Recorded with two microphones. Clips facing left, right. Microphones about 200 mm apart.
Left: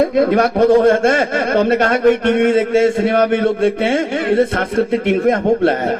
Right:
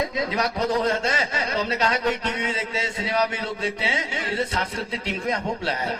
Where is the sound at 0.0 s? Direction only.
55° left (ahead or behind).